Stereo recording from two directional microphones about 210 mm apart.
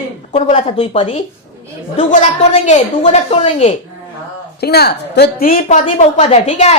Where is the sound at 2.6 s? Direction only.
35° left (ahead or behind).